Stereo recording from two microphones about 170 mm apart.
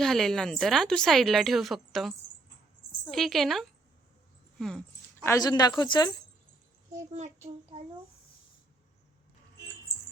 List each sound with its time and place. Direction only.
0.0 s a woman's voice: centre (ahead or behind)
5.2 s a woman's voice: 20° left (ahead or behind)
7.1 s a child's voice: 40° right (ahead or behind)